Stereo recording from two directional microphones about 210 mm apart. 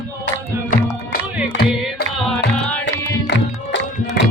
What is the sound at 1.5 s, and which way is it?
Music, 50° left (ahead or behind).